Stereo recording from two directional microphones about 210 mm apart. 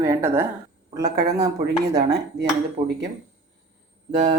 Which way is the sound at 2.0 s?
50° right (ahead or behind).